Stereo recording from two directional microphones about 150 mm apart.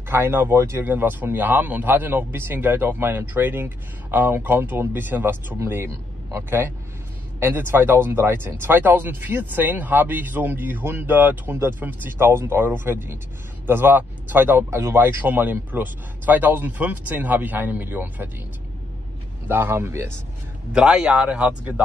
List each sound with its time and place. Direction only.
0.1 s speech: 15° right (ahead or behind)
19.4 s speech: 15° right (ahead or behind)
20.7 s speech: 5° right (ahead or behind)